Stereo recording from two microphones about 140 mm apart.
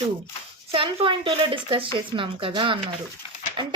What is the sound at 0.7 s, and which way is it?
Child singing, 40° right (ahead or behind).